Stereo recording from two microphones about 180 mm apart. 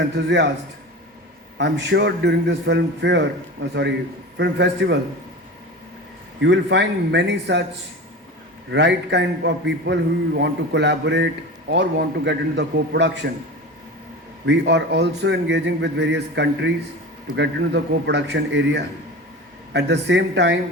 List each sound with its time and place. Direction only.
0.0 s a man's voice: 80° right
1.5 s a man's voice: 80° right
6.4 s a man's voice: 75° right (ahead or behind)
8.7 s a man's voice: 75° right (ahead or behind)
14.4 s a man's voice: 75° right (ahead or behind)